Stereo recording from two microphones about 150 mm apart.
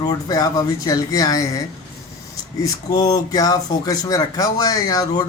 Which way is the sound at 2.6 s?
25° left (ahead or behind).